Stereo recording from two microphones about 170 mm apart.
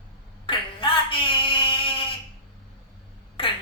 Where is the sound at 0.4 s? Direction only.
30° left (ahead or behind).